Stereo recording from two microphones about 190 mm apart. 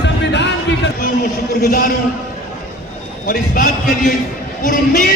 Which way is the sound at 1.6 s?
45° left (ahead or behind).